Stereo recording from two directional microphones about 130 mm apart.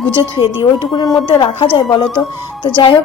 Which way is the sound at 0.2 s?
20° right (ahead or behind).